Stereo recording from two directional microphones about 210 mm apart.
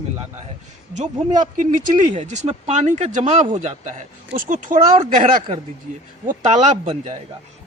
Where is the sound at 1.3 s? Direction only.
35° right (ahead or behind).